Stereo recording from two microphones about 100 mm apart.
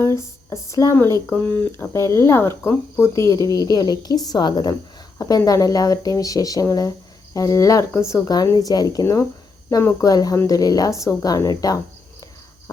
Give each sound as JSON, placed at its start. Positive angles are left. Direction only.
{"t": 0.0, "sound": "speech", "side_deg": 30}
{"t": 1.9, "sound": "a woman's voice", "side_deg": 30}